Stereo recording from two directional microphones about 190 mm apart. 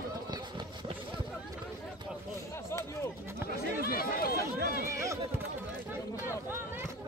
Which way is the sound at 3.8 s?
50° left (ahead or behind).